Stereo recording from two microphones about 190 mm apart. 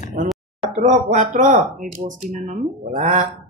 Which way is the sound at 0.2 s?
45° right (ahead or behind).